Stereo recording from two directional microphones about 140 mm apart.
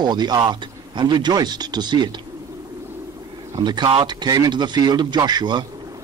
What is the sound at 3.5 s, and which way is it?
Speech, 30° right (ahead or behind).